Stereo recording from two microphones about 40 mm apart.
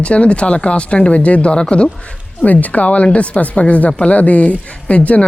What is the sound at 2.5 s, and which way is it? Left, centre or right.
Speech, left.